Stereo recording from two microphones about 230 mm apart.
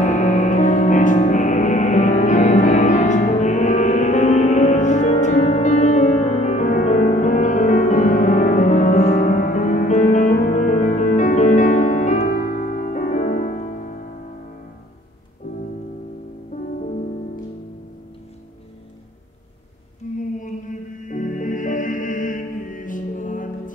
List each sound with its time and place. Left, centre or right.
0.0 s music: left
15.4 s music: left
20.2 s mantra: left
21.1 s music: left